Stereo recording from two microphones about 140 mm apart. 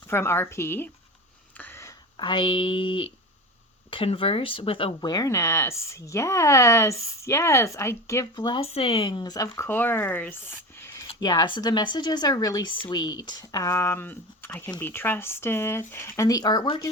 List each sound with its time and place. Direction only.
0.1 s a woman's voice: 15° left (ahead or behind)
1.5 s a sound: 15° left (ahead or behind)
2.1 s speech: 35° left (ahead or behind)
8.4 s speech: 35° left (ahead or behind)
8.7 s speech: 45° left (ahead or behind); by 9.6 s 25° left (ahead or behind)
9.6 s speech: 15° left (ahead or behind)
11.2 s speech: 30° left (ahead or behind)